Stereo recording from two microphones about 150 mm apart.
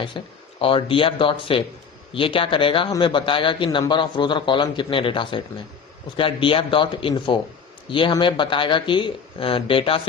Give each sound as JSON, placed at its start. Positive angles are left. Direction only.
{"t": 0.1, "sound": "a man's voice", "side_deg": 30}